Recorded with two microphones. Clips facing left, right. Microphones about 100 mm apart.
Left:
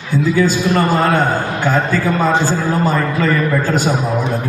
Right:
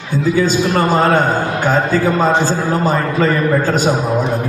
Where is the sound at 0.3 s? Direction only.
20° right (ahead or behind).